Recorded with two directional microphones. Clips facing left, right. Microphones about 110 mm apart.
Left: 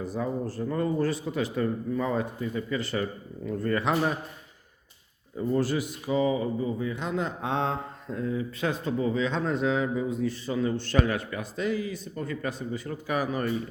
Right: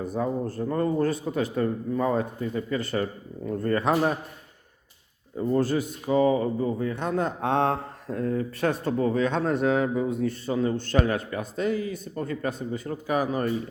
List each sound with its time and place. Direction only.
0.0 s a man's voice: 50° right (ahead or behind)
0.6 s speech: 40° right (ahead or behind)
5.5 s a man's voice: 45° right (ahead or behind)
10.5 s speech: 40° right (ahead or behind)